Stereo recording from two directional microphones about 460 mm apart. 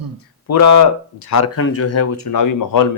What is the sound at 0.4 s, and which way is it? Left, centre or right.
Speech, left.